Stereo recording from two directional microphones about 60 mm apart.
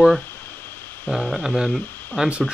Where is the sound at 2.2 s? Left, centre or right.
Centre.